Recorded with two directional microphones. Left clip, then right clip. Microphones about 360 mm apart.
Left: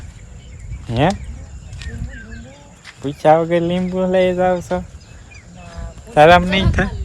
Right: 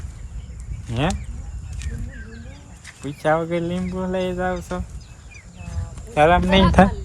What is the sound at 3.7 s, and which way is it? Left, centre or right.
Speech, centre.